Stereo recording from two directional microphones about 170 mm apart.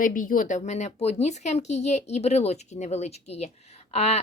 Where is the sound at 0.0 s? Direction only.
50° left (ahead or behind).